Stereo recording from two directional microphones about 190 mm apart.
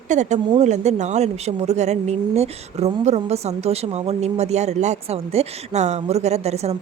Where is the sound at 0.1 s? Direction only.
40° right (ahead or behind).